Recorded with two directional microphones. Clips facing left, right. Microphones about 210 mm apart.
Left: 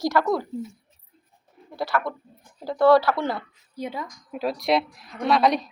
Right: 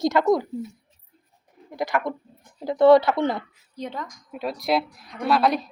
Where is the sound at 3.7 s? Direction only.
10° left (ahead or behind).